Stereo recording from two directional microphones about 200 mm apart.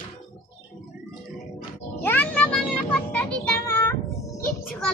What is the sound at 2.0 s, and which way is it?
Music, 10° left (ahead or behind).